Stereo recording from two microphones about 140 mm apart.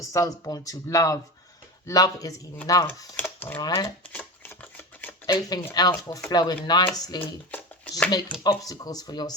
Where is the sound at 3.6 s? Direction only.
30° left (ahead or behind).